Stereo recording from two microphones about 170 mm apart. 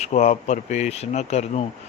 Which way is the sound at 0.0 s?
45° left (ahead or behind).